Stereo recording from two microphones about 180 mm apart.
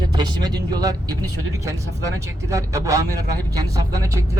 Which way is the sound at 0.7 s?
20° right (ahead or behind).